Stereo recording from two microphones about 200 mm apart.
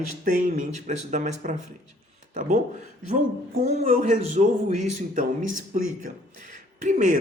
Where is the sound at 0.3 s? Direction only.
40° right (ahead or behind).